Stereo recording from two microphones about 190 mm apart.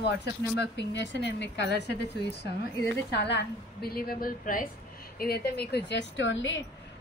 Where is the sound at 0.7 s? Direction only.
70° left (ahead or behind).